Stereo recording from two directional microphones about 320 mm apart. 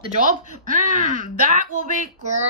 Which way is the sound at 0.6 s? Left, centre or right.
Right.